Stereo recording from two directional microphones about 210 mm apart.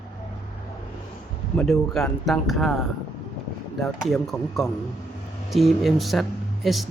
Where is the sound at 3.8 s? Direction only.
Centre (ahead or behind).